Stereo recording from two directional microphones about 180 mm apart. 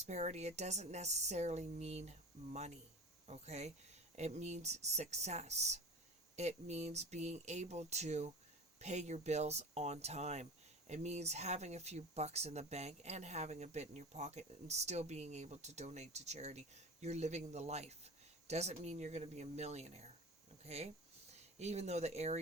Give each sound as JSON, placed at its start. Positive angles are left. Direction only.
{"t": 0.0, "sound": "speech", "side_deg": -40}